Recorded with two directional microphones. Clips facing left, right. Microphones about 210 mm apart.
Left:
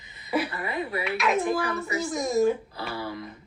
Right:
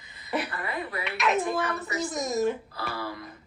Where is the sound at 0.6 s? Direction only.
25° left (ahead or behind).